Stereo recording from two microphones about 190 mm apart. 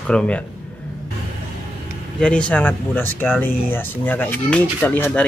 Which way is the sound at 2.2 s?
5° left (ahead or behind).